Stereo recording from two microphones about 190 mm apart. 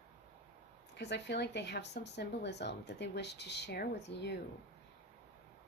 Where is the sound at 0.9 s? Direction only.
65° left (ahead or behind).